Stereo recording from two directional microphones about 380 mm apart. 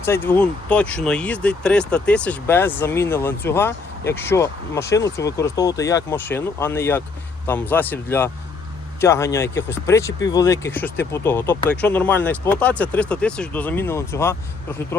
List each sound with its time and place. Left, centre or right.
0.0 s speech: centre